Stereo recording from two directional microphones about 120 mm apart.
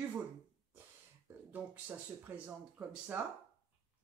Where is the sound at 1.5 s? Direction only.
15° right (ahead or behind).